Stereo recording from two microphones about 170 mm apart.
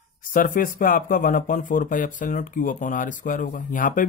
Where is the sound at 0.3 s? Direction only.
55° left (ahead or behind).